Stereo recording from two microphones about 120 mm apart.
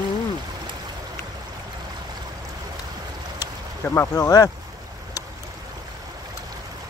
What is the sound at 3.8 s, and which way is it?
Speech, 20° left (ahead or behind).